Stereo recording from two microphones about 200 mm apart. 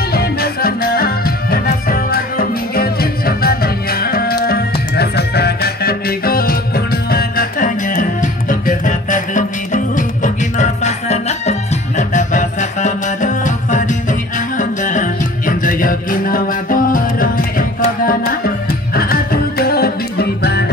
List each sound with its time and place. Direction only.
0.1 s music: 50° left (ahead or behind)